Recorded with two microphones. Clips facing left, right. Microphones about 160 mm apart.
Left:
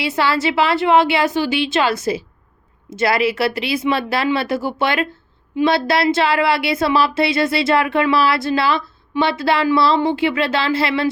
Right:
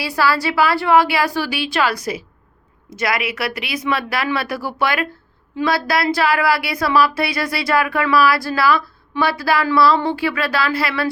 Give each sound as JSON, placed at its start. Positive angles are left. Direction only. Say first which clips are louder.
{"t": 0.0, "sound": "speech", "louder": "left 1 dB", "side_deg": 25}